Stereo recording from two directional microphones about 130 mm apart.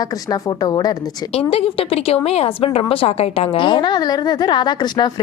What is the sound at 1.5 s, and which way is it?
A woman's voice, 45° left (ahead or behind).